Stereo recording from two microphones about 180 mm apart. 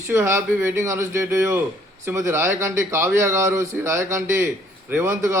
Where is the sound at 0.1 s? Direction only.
15° right (ahead or behind).